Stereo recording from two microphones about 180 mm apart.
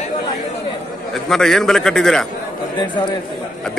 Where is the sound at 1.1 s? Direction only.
Centre (ahead or behind).